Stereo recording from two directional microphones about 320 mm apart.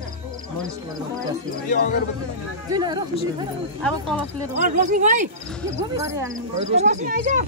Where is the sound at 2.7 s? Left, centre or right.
Centre.